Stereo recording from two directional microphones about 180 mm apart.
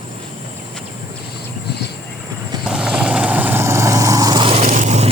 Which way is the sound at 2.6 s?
5° right (ahead or behind).